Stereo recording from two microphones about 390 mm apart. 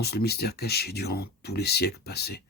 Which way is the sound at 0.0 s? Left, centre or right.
Left.